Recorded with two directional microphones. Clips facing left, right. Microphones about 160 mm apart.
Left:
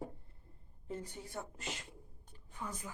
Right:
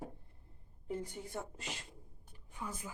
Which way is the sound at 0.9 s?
15° right (ahead or behind).